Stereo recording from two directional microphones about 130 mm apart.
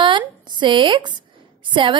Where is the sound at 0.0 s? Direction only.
35° right (ahead or behind).